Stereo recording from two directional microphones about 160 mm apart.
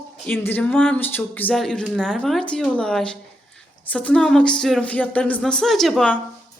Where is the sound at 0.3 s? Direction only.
10° left (ahead or behind).